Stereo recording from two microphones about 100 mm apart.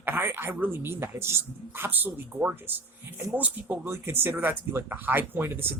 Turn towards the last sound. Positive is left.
turn(degrees=-20)  # may be behind; listen again after turning